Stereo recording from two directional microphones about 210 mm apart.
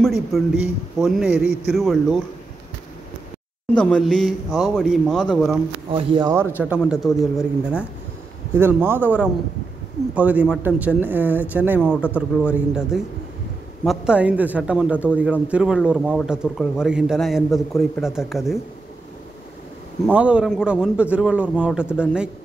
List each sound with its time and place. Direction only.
0.0 s a man's voice: centre (ahead or behind)
3.7 s a man's voice: 5° left (ahead or behind)
5.9 s speech: 25° right (ahead or behind)
6.3 s a man's voice: 10° right (ahead or behind)
8.5 s a man's voice: 10° right (ahead or behind)
20.1 s a man's voice: 5° right (ahead or behind)